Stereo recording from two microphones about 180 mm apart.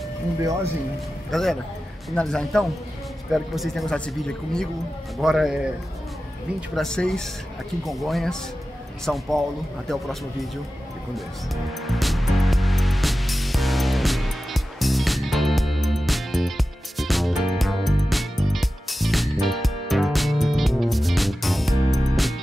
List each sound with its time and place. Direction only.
0.4 s speech: 15° right (ahead or behind)
1.3 s speech: centre (ahead or behind)
6.7 s speech: 5° left (ahead or behind)
11.1 s music: centre (ahead or behind)